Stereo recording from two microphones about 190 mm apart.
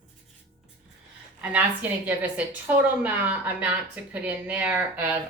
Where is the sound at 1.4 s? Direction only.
10° right (ahead or behind).